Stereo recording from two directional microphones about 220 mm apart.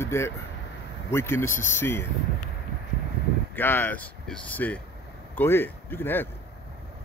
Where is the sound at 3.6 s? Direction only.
10° left (ahead or behind).